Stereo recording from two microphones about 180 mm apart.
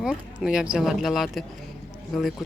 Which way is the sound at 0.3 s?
5° right (ahead or behind).